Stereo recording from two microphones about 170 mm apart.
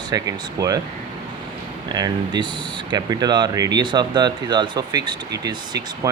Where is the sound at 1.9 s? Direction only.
25° right (ahead or behind).